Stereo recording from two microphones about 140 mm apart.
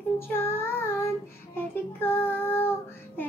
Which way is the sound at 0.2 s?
15° left (ahead or behind).